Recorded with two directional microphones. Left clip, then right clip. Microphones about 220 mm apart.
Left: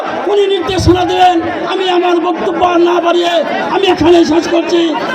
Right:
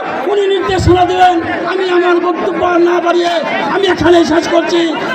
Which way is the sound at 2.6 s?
30° left (ahead or behind).